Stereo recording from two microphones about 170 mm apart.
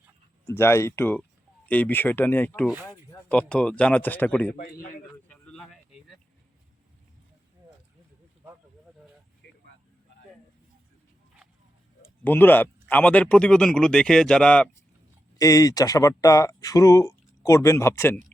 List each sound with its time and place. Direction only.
0.4 s speech: 15° left (ahead or behind)
2.6 s speech: 5° right (ahead or behind)
3.2 s speech: 5° left (ahead or behind)
4.5 s a man's voice: 60° left (ahead or behind)
5.3 s a sound: 5° left (ahead or behind)
9.4 s a sound: 90° left
12.2 s speech: 10° left (ahead or behind)
15.4 s speech: 20° left (ahead or behind)